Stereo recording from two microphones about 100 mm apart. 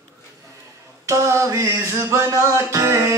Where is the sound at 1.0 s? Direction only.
30° right (ahead or behind).